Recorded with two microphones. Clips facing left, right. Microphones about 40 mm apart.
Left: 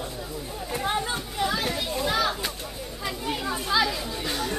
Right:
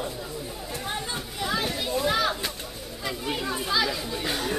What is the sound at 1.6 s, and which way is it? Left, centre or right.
Children playing, centre.